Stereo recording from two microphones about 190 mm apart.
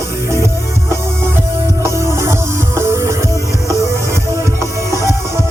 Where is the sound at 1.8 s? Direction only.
15° right (ahead or behind).